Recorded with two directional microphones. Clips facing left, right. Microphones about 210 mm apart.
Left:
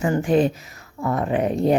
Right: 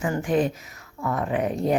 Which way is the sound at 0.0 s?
30° left (ahead or behind).